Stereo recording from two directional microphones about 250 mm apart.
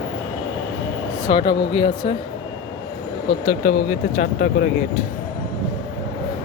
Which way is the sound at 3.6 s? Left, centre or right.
Left.